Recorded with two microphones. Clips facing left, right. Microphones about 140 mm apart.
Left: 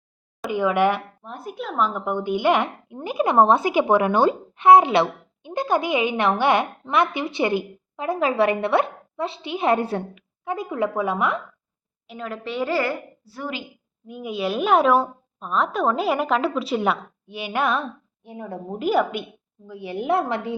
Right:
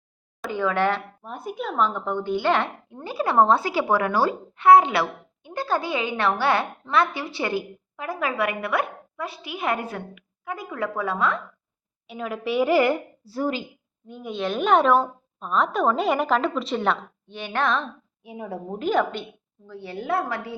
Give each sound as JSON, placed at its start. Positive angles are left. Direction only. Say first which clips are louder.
{"t": 0.5, "sound": "speech", "louder": "left 3 dB", "side_deg": 15}
{"t": 1.2, "sound": "a woman's voice", "louder": "right 1 dB", "side_deg": 0}
{"t": 12.0, "sound": "a woman's voice", "louder": "right 3 dB", "side_deg": -5}
{"t": 13.2, "sound": "speech", "louder": "right 6 dB", "side_deg": -35}
{"t": 14.1, "sound": "a woman's voice", "louder": "left 2 dB", "side_deg": 5}
{"t": 18.2, "sound": "a woman's voice", "louder": "even", "side_deg": -5}
{"t": 18.8, "sound": "a woman's voice", "louder": "left 2 dB", "side_deg": 5}